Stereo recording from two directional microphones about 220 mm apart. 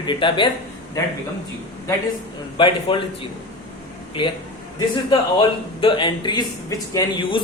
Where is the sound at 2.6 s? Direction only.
20° left (ahead or behind).